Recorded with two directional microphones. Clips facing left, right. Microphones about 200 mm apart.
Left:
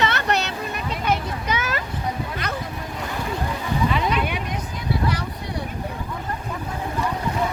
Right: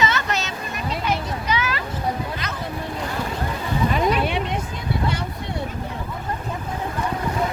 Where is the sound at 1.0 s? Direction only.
50° left (ahead or behind).